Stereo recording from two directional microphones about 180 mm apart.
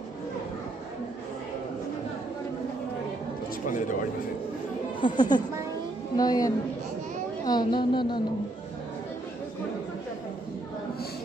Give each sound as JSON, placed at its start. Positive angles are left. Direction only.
{"t": 3.6, "sound": "speech", "side_deg": 45}
{"t": 5.0, "sound": "a woman's voice", "side_deg": 25}